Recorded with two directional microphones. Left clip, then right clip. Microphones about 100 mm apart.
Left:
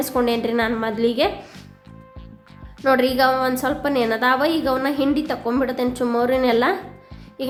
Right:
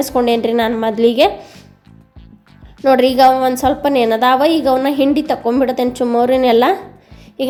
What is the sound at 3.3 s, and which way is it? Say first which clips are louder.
A woman's voice: right 7 dB; 45° right (ahead or behind).